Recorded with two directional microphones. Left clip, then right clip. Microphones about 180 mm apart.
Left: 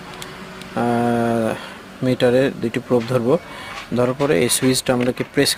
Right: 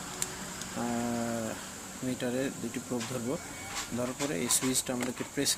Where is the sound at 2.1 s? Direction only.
50° left (ahead or behind).